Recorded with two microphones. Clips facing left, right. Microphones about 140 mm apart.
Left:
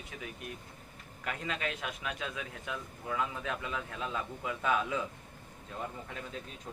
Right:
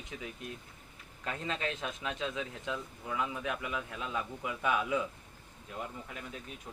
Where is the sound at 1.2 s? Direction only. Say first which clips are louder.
Right 1 dB; 30° right (ahead or behind).